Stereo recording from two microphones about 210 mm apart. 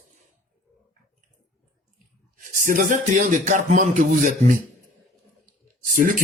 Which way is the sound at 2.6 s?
40° right (ahead or behind).